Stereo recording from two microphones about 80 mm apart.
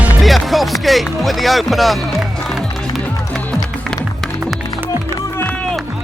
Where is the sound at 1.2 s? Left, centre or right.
Centre.